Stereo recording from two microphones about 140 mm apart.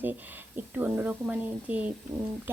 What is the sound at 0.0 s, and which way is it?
Speech, 15° right (ahead or behind).